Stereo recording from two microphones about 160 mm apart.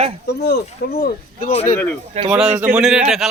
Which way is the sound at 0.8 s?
90° left.